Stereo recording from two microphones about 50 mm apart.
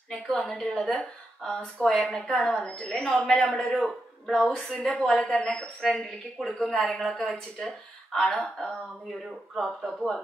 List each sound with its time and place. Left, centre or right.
0.1 s a woman's voice: centre
2.8 s a woman's voice: left
3.3 s a woman's voice: centre
4.9 s a woman's voice: left
6.3 s a woman's voice: centre